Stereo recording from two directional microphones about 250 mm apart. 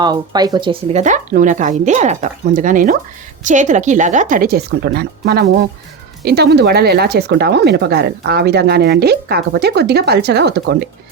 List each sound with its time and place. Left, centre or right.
0.0 s speech: centre; by 10.8 s right